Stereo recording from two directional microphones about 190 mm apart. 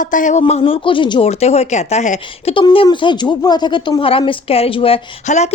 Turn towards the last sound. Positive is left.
turn(degrees=35)  # may be behind; listen again after turning